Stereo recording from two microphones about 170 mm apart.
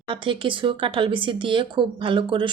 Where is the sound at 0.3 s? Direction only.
30° right (ahead or behind).